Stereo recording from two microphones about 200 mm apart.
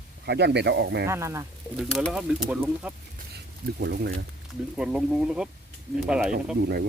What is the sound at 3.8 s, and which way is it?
Speech, 50° right (ahead or behind).